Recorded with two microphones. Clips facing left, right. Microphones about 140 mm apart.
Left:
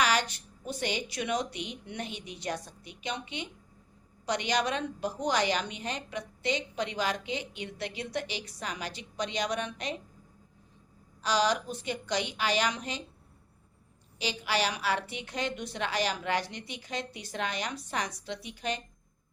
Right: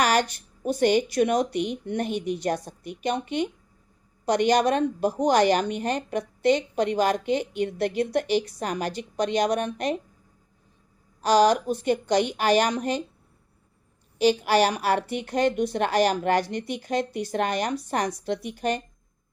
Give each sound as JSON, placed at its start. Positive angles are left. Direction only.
{"t": 0.0, "sound": "a woman's voice", "side_deg": -50}
{"t": 11.2, "sound": "a woman's voice", "side_deg": -45}
{"t": 14.2, "sound": "a woman's voice", "side_deg": -50}